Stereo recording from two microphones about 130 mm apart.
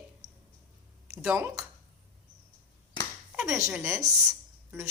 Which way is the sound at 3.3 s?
20° right (ahead or behind).